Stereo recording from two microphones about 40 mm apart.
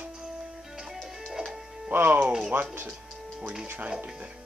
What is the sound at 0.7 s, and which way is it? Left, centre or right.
Music, centre.